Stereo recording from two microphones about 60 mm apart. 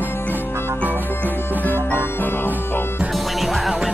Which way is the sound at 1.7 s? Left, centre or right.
Left.